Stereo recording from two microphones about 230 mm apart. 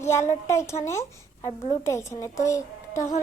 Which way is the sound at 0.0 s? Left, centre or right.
Centre.